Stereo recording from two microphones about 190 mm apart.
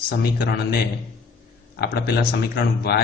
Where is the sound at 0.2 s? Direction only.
55° left (ahead or behind).